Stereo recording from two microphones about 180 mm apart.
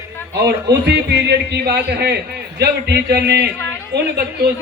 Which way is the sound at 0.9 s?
65° right (ahead or behind).